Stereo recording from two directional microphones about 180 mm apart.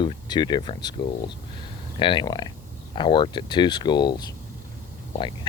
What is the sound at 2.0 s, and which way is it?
Speech, 25° left (ahead or behind).